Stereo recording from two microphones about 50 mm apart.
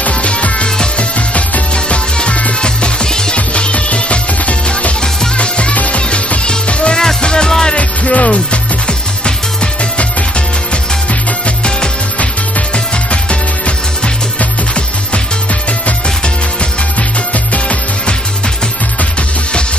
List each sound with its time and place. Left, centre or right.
0.0 s music: left
11.4 s music: left
17.3 s music: left